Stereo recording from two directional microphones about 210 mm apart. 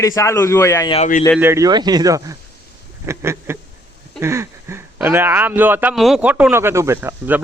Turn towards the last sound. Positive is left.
turn(degrees=-10)  # may be behind; listen again after turning